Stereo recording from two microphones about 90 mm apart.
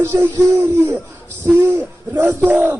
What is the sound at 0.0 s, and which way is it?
Speech, 25° right (ahead or behind).